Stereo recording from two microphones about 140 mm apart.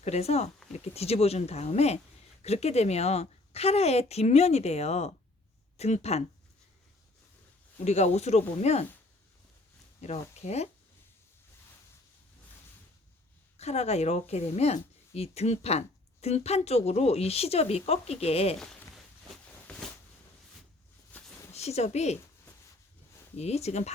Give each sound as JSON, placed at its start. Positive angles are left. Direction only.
{"t": 0.0, "sound": "a woman's voice", "side_deg": 50}
{"t": 7.9, "sound": "a woman's voice", "side_deg": 50}
{"t": 10.0, "sound": "a woman's voice", "side_deg": 50}
{"t": 13.6, "sound": "a woman's voice", "side_deg": 50}
{"t": 19.7, "sound": "a sound", "side_deg": 5}
{"t": 21.1, "sound": "a sound", "side_deg": 10}
{"t": 21.5, "sound": "a woman's voice", "side_deg": 50}
{"t": 23.4, "sound": "a woman's voice", "side_deg": 50}